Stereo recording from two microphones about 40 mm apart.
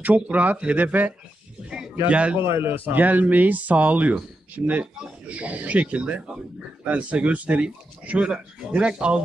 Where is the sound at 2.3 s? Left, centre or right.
Right.